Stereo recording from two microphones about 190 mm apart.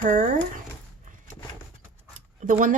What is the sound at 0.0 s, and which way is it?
Speech, 45° right (ahead or behind).